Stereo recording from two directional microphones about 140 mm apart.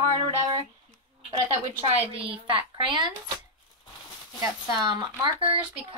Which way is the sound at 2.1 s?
40° right (ahead or behind).